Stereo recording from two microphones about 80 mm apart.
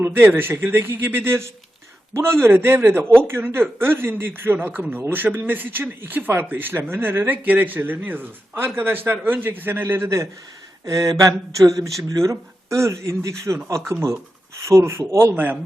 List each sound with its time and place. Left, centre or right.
0.0 s speech: right
10.8 s a sound: right
12.0 s speech: right